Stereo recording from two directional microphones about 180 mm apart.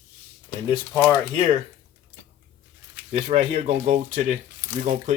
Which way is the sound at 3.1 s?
35° right (ahead or behind).